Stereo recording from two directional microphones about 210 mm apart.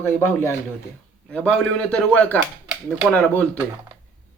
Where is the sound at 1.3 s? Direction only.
5° left (ahead or behind).